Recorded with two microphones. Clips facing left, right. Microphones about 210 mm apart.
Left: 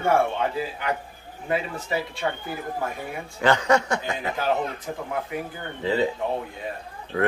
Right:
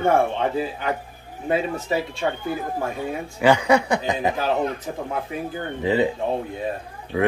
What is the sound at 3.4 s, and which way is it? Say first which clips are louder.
Speech: right 3 dB; 10° right (ahead or behind).